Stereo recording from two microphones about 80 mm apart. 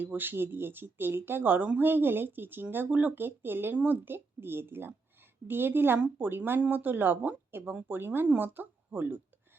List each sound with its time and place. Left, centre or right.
0.0 s speech: right